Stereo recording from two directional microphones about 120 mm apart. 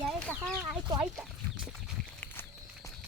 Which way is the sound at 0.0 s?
Centre (ahead or behind).